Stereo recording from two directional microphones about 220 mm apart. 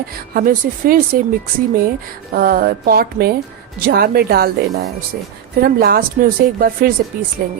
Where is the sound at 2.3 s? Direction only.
40° right (ahead or behind).